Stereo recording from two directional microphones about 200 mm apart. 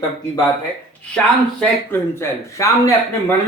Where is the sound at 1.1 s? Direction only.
10° left (ahead or behind).